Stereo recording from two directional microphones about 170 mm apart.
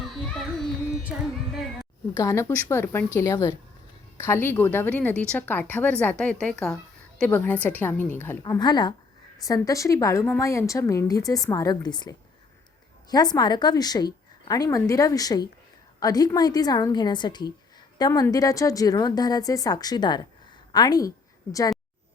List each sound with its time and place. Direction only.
0.0 s music: centre (ahead or behind)
1.0 s speech: centre (ahead or behind)
2.1 s a woman's voice: 15° left (ahead or behind)
8.5 s a woman's voice: 25° left (ahead or behind)